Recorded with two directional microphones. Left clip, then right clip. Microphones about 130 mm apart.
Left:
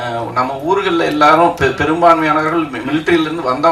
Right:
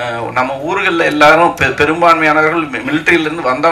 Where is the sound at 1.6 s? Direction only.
35° right (ahead or behind).